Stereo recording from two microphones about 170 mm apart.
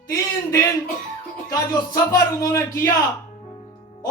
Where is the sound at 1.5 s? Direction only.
20° left (ahead or behind).